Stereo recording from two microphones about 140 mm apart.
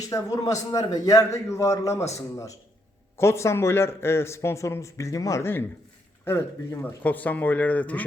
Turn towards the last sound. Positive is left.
turn(degrees=10)  # may be behind; listen again after turning